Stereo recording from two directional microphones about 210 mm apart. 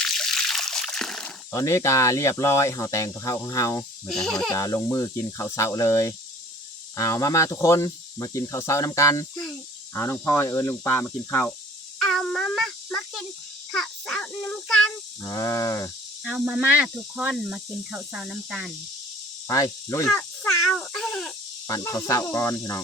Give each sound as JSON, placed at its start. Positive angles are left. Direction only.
{"t": 0.0, "sound": "trickle", "side_deg": 0}
{"t": 1.5, "sound": "speech", "side_deg": 15}
{"t": 4.0, "sound": "speech", "side_deg": 0}
{"t": 4.5, "sound": "speech", "side_deg": 15}
{"t": 11.9, "sound": "a sound", "side_deg": 0}
{"t": 15.2, "sound": "speech", "side_deg": 15}
{"t": 16.2, "sound": "speech", "side_deg": -5}
{"t": 19.5, "sound": "speech", "side_deg": 15}
{"t": 20.1, "sound": "a sound", "side_deg": 0}
{"t": 21.7, "sound": "speech", "side_deg": 15}